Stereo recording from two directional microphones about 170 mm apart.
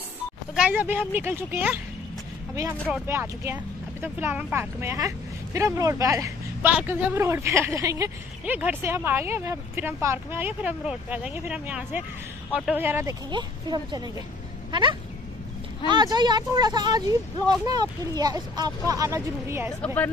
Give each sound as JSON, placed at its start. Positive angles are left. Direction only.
{"t": 0.6, "sound": "speech", "side_deg": -10}
{"t": 2.9, "sound": "speech", "side_deg": -15}
{"t": 6.7, "sound": "speech", "side_deg": -5}
{"t": 13.3, "sound": "speech", "side_deg": -25}
{"t": 19.8, "sound": "a woman's voice", "side_deg": 10}